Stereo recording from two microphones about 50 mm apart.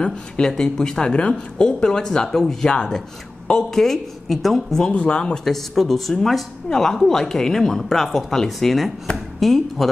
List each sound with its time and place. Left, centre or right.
0.0 s speech: centre
4.8 s speech: left
5.4 s a woman's voice: centre